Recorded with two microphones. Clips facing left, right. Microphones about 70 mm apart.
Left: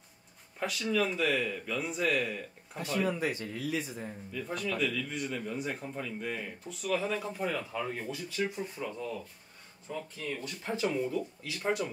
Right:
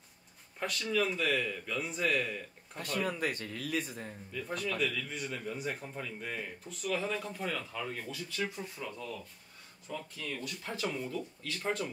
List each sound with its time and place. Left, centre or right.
0.6 s speech: centre
3.2 s speech: right
4.3 s speech: centre; by 10.9 s left
10.9 s speech: centre